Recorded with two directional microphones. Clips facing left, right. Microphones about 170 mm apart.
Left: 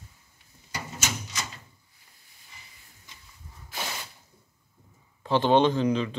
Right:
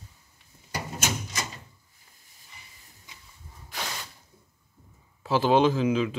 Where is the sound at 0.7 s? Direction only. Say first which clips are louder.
Right 3 dB; 55° right (ahead or behind).